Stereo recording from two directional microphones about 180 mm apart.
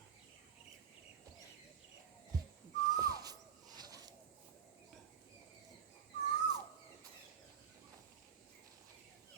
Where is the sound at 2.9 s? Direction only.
20° right (ahead or behind).